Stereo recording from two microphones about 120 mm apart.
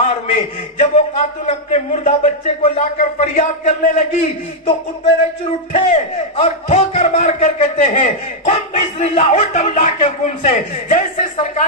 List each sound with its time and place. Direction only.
0.0 s a man's voice: 75° left (ahead or behind)
5.7 s a man's voice: 85° left
6.3 s a man's voice: 60° left (ahead or behind); by 7.7 s 90° left
7.7 s a man's voice: 80° left